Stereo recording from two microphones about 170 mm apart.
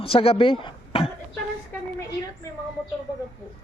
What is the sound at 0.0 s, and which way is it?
Speech, 35° left (ahead or behind).